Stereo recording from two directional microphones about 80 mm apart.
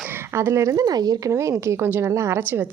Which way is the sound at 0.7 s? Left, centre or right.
Right.